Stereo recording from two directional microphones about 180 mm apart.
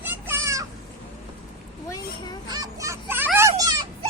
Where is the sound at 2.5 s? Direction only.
20° right (ahead or behind).